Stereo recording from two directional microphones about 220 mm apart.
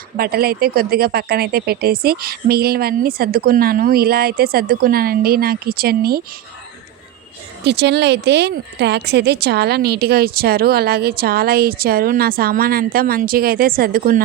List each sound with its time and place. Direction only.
0.2 s speech: 45° right (ahead or behind)
7.6 s speech: 50° right (ahead or behind)